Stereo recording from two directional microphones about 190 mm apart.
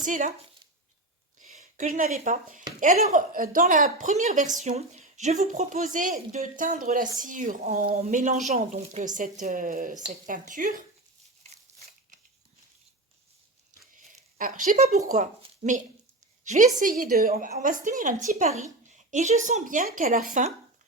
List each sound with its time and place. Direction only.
0.0 s speech: 45° right (ahead or behind)
1.4 s speech: 40° right (ahead or behind)
11.4 s a sound: 40° right (ahead or behind)
13.9 s a woman's voice: 45° right (ahead or behind)